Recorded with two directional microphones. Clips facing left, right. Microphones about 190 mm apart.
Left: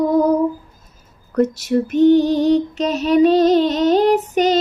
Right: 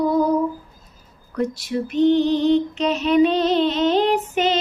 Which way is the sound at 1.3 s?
45° left (ahead or behind).